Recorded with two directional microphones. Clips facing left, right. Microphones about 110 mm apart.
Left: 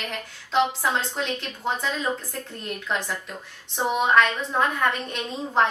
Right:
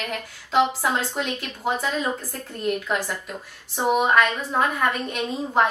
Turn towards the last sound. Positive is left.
turn(degrees=-5)  # may be behind; listen again after turning